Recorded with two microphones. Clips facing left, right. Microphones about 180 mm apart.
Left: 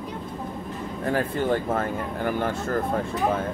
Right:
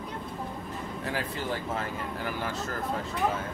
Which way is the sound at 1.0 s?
55° left (ahead or behind).